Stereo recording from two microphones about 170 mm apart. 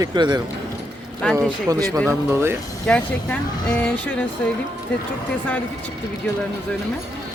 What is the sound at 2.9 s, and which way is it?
Speech, 5° left (ahead or behind).